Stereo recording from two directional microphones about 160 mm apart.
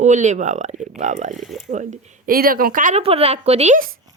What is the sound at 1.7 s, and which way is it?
Speech, 50° right (ahead or behind).